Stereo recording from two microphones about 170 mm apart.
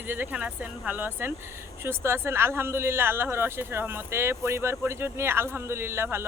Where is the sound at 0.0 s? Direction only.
10° right (ahead or behind).